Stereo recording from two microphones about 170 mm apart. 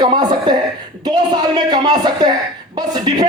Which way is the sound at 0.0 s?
25° right (ahead or behind).